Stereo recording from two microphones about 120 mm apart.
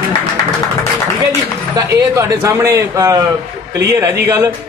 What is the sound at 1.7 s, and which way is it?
A man's voice, 25° right (ahead or behind).